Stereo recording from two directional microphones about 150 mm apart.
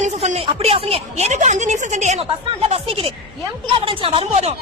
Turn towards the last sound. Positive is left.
turn(degrees=-35)  # may be behind; listen again after turning